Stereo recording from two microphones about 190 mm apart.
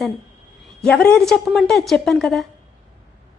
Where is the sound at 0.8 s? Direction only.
5° left (ahead or behind).